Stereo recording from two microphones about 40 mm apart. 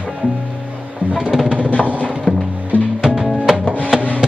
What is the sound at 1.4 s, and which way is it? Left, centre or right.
Music, right.